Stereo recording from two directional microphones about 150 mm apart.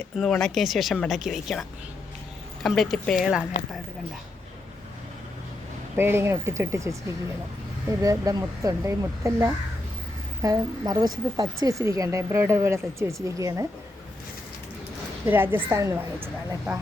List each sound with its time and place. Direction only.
0.2 s speech: 5° left (ahead or behind)
2.6 s speech: centre (ahead or behind)
6.0 s a woman's voice: 15° right (ahead or behind)
15.3 s a woman's voice: 15° right (ahead or behind)